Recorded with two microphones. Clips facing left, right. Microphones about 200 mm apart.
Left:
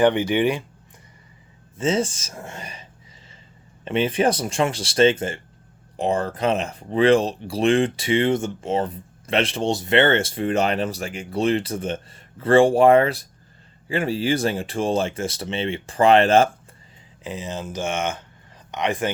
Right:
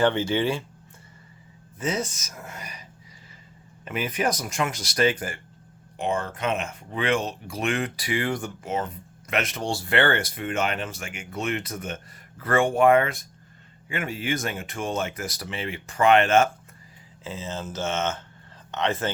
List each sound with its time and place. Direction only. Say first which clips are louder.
0.0 s speech: left 4 dB; 15° left (ahead or behind)
1.8 s speech: left 6 dB; 25° left (ahead or behind)
3.8 s speech: left 6 dB; 30° left (ahead or behind)
17.2 s speech: left 3 dB; 15° left (ahead or behind)